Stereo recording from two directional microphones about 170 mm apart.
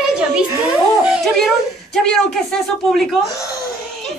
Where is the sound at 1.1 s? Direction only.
Centre (ahead or behind).